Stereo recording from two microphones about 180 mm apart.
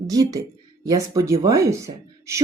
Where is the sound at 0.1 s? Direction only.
20° right (ahead or behind).